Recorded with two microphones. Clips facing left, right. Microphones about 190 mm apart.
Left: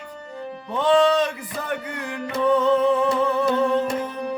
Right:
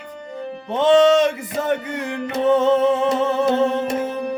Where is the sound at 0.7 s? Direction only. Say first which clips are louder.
Right 4 dB; 20° right (ahead or behind).